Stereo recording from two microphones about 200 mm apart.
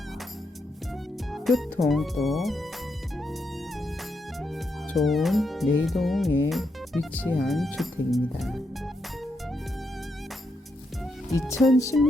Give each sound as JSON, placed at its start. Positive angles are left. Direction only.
{"t": 1.3, "sound": "speech", "side_deg": 0}
{"t": 4.4, "sound": "speech", "side_deg": 0}
{"t": 11.3, "sound": "speech", "side_deg": 15}